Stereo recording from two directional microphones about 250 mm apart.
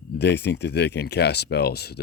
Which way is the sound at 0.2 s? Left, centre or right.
Left.